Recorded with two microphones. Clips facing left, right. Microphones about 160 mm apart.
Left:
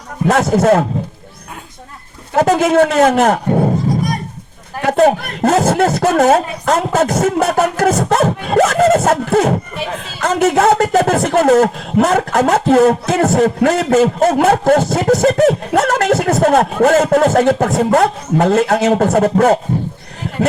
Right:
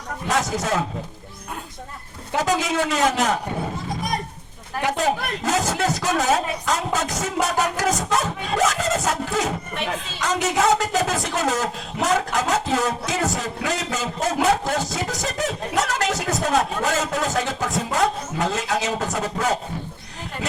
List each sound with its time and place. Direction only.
0.3 s speech: 60° left (ahead or behind)
2.3 s speech: 60° left (ahead or behind)
4.9 s speech: 60° left (ahead or behind)